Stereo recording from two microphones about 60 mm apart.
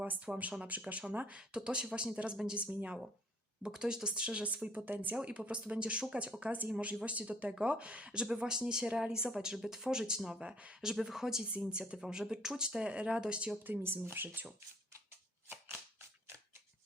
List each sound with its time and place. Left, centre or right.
0.3 s speech: centre
0.6 s speech: right
1.4 s speech: centre
2.6 s speech: right
4.9 s speech: right
5.2 s speech: centre
10.4 s speech: right
10.8 s speech: centre
13.7 s speech: right